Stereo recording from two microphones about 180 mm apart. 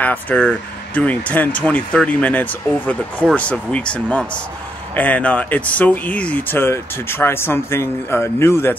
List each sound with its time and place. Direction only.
0.0 s speech: 10° left (ahead or behind)